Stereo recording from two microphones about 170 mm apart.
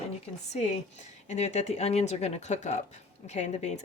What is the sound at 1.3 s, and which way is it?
A woman's voice, 40° left (ahead or behind).